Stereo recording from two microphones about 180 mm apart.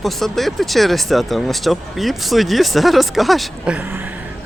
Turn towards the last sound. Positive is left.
turn(degrees=0)  # may be behind; listen again after turning